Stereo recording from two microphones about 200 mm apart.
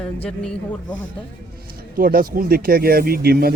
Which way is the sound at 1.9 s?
45° right (ahead or behind).